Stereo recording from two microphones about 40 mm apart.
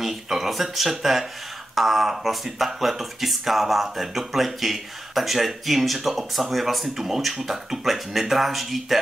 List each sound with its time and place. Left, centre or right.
0.0 s speech: centre